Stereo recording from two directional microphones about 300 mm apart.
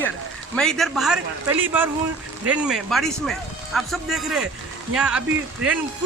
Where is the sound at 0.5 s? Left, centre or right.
Centre.